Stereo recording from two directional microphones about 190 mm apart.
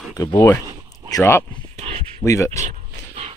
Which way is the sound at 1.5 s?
30° right (ahead or behind).